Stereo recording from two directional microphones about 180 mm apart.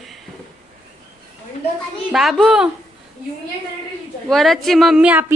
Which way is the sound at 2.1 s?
Centre (ahead or behind).